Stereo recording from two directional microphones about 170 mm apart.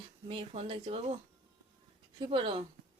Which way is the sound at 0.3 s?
35° right (ahead or behind).